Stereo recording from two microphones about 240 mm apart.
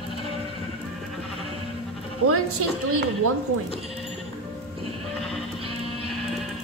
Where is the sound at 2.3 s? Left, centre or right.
Right.